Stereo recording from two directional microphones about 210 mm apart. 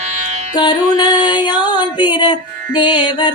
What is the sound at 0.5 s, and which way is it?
Music, 20° left (ahead or behind).